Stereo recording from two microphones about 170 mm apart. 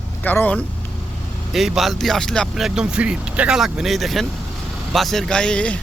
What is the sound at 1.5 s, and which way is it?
Speech, centre (ahead or behind).